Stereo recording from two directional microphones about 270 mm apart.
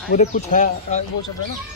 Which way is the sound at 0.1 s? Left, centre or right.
Left.